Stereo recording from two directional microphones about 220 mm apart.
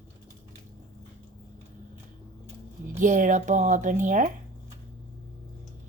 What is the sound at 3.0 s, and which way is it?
Speech, 35° right (ahead or behind).